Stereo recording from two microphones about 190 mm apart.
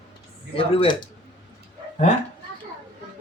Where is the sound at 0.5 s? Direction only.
30° left (ahead or behind).